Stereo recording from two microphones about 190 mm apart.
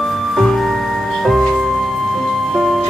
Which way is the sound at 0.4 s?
Centre (ahead or behind).